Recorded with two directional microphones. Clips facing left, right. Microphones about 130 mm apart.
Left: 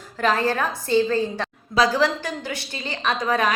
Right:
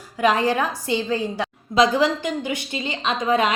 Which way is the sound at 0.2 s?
15° right (ahead or behind).